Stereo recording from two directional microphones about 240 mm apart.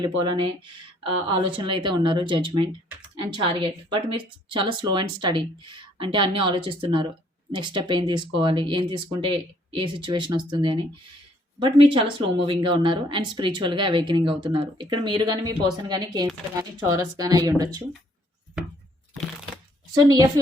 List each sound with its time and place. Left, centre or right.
0.0 s speech: centre
18.6 s a sound: centre
20.1 s speech: centre